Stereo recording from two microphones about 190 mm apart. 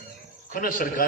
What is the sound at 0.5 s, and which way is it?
Speech, 45° left (ahead or behind).